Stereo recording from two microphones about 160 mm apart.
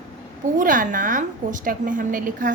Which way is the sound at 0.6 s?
55° right (ahead or behind).